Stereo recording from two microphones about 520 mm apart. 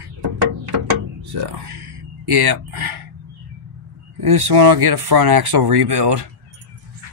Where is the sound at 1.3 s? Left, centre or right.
Right.